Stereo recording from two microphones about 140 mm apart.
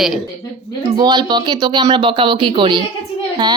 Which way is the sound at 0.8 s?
30° right (ahead or behind).